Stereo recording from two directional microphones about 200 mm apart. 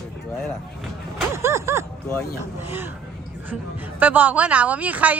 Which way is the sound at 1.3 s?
15° right (ahead or behind).